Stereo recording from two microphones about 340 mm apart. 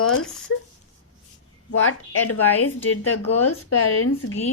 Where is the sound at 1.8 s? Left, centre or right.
Left.